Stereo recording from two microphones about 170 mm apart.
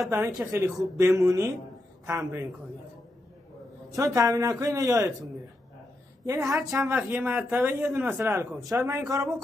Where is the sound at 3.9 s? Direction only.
20° right (ahead or behind).